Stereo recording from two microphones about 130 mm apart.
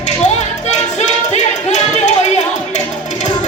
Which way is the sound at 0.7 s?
65° left (ahead or behind).